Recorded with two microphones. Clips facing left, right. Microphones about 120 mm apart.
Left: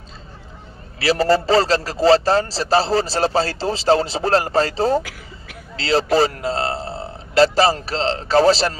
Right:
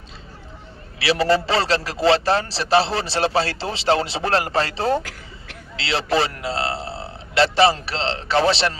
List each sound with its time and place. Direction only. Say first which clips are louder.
0.9 s a man's voice: left 2 dB; 40° left (ahead or behind)